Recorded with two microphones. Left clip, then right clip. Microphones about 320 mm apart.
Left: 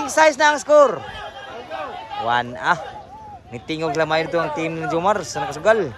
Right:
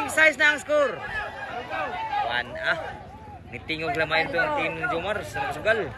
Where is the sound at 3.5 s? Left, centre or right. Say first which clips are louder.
Left 4 dB; centre.